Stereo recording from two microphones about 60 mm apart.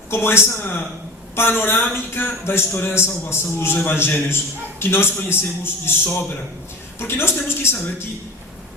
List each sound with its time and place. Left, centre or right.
0.1 s speech: left
1.4 s a man's voice: left